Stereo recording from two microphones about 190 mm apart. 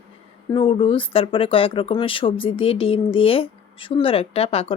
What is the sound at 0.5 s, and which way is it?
Speech, 30° left (ahead or behind).